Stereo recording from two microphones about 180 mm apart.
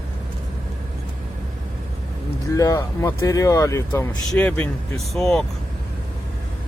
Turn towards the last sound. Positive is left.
turn(degrees=0)  # may be behind; listen again after turning